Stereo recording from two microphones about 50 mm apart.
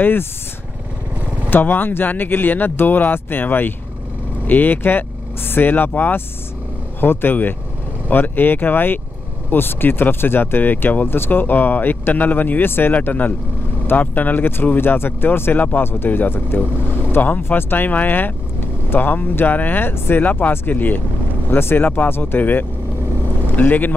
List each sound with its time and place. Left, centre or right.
0.0 s speech: left
1.5 s speech: left
15.5 s speech: left
15.8 s speech: left
20.2 s speech: left
21.5 s speech: left